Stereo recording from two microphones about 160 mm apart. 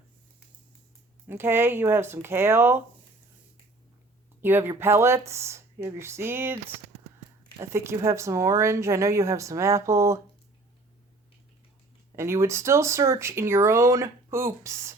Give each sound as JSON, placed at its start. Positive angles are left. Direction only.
{"t": 1.3, "sound": "speech", "side_deg": -15}
{"t": 4.4, "sound": "speech", "side_deg": -15}
{"t": 7.6, "sound": "speech", "side_deg": -15}
{"t": 12.1, "sound": "speech", "side_deg": -15}